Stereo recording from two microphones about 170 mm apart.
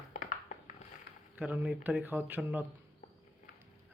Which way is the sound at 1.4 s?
10° right (ahead or behind).